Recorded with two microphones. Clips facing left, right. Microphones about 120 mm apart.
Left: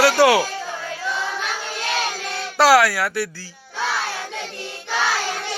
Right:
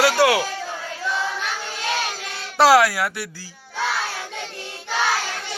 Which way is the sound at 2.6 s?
20° right (ahead or behind).